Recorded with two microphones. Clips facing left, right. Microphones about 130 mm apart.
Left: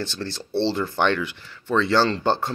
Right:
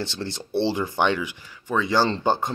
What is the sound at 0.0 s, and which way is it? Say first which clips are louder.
Speech: even; 20° right (ahead or behind).